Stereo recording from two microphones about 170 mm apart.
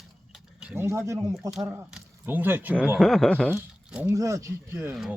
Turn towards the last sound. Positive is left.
turn(degrees=-15)  # may be behind; listen again after turning